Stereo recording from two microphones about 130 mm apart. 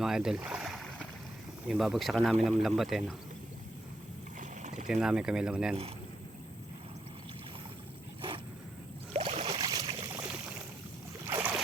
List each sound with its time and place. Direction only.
0.0 s boat: 5° right (ahead or behind)
1.6 s speech: centre (ahead or behind)
4.4 s a sound: 65° right (ahead or behind)
4.9 s speech: 5° right (ahead or behind)
9.1 s boat: 45° right (ahead or behind)
9.6 s a sound: 30° right (ahead or behind)
11.3 s boat: 20° right (ahead or behind)